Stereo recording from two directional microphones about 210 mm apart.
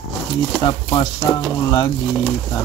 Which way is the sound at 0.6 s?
20° left (ahead or behind).